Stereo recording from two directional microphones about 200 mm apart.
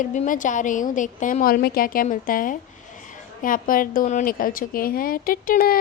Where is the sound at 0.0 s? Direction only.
40° left (ahead or behind).